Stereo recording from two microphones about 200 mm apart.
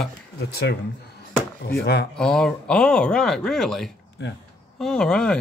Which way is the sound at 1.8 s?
55° left (ahead or behind).